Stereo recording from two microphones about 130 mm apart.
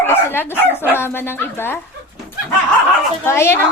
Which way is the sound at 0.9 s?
20° left (ahead or behind).